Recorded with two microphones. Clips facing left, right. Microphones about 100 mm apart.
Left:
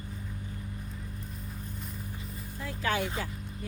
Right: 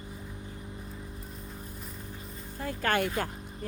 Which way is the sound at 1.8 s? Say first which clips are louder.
Left 1 dB; centre (ahead or behind).